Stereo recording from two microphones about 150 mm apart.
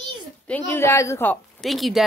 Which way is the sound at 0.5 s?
15° left (ahead or behind).